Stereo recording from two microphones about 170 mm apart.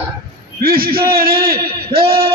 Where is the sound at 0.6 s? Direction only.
60° right (ahead or behind).